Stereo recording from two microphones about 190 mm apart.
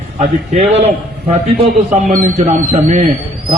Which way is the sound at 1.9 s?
45° right (ahead or behind).